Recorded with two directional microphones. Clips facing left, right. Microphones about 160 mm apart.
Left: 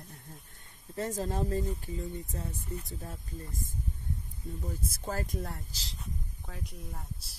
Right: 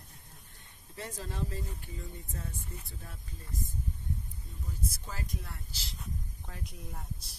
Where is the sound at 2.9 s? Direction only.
40° left (ahead or behind).